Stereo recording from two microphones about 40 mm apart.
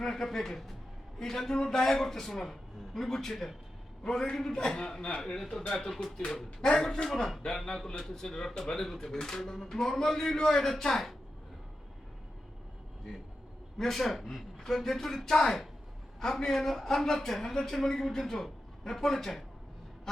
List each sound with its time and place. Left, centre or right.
0.0 s a man's voice: centre
13.7 s a man's voice: centre